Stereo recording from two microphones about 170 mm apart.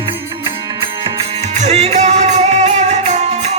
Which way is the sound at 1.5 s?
40° right (ahead or behind).